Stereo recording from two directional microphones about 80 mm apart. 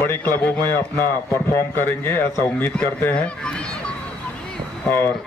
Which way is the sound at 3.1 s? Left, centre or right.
Centre.